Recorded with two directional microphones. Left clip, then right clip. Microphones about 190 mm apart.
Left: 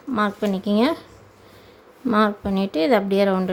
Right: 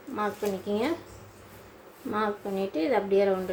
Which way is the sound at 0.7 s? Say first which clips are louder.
Left 9 dB; 60° left (ahead or behind).